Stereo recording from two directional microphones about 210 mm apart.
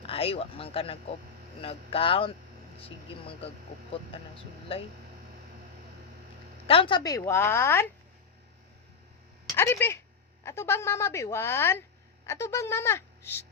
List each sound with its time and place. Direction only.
0.0 s speech: 25° left (ahead or behind)
6.7 s a woman's voice: 25° left (ahead or behind)
9.6 s a woman's voice: 10° left (ahead or behind)